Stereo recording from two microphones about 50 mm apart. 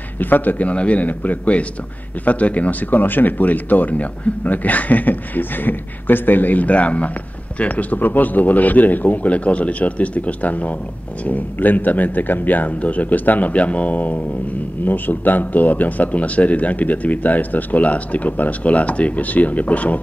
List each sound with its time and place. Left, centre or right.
0.2 s speech: left